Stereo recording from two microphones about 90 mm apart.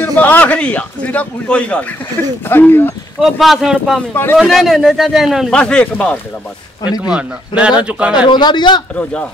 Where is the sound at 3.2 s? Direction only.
Centre (ahead or behind).